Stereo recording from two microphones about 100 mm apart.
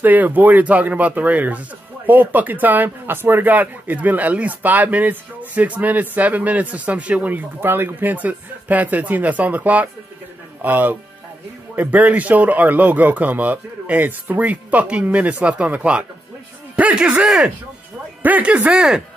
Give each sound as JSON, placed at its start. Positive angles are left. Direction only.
{"t": 0.0, "sound": "a man's voice", "side_deg": -15}